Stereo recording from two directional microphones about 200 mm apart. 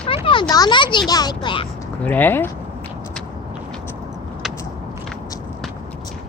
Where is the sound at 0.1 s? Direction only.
25° left (ahead or behind).